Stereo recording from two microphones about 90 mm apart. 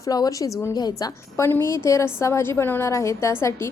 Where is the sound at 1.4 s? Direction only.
30° left (ahead or behind).